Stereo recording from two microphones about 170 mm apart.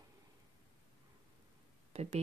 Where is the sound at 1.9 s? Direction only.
40° right (ahead or behind).